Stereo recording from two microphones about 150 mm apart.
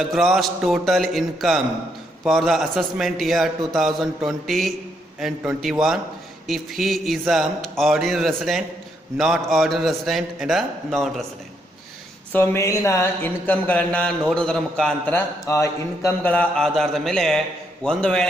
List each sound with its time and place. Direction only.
0.0 s a man's voice: centre (ahead or behind)
12.3 s a sound: 15° left (ahead or behind)
15.4 s a man's voice: 20° left (ahead or behind); by 18.3 s 5° left (ahead or behind)